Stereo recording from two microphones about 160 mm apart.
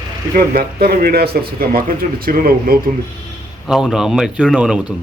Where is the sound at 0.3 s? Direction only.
75° right (ahead or behind).